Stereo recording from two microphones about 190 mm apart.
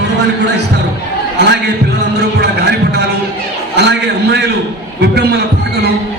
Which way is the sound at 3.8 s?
65° right (ahead or behind).